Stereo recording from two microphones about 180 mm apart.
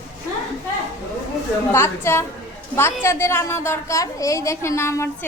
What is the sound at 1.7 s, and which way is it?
A woman's voice, 15° left (ahead or behind).